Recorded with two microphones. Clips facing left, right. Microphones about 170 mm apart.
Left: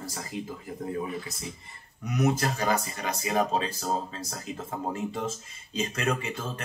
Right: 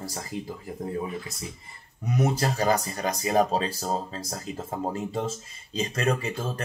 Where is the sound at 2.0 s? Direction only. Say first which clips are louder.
Right 1 dB; 30° right (ahead or behind).